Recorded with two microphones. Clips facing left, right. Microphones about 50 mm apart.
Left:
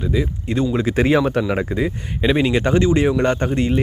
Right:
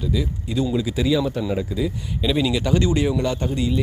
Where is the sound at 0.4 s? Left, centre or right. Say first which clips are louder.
Left 2 dB; left.